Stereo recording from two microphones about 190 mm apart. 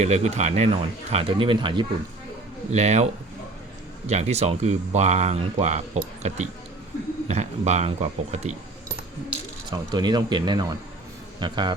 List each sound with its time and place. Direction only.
0.0 s speech: 35° right (ahead or behind)
2.7 s speech: 35° right (ahead or behind)
9.6 s speech: 25° right (ahead or behind)